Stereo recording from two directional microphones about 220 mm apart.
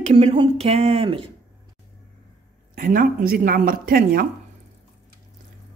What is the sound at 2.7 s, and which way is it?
Speech, 40° right (ahead or behind).